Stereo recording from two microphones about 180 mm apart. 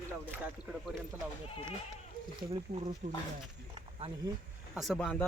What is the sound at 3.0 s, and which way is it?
Speech, 40° right (ahead or behind).